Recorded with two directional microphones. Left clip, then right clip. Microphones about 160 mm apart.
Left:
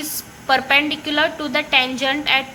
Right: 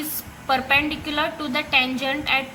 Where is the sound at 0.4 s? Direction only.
20° left (ahead or behind).